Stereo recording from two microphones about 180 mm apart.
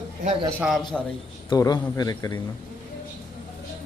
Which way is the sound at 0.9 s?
5° left (ahead or behind).